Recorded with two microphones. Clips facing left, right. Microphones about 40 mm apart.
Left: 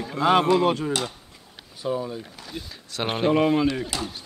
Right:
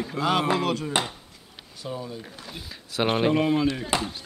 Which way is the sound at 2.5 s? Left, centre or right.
Centre.